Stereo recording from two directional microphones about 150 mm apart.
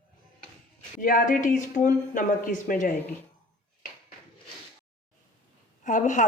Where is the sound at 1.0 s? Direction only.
60° left (ahead or behind).